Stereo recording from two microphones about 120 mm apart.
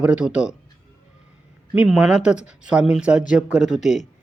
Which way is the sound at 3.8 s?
80° left.